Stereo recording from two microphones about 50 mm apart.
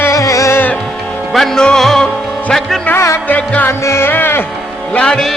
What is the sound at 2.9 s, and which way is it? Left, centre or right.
Music, left.